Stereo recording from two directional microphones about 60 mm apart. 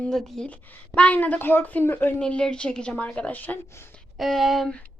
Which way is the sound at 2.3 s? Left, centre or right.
Centre.